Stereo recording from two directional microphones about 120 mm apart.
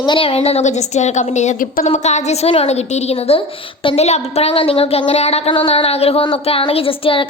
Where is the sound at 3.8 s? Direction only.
45° left (ahead or behind).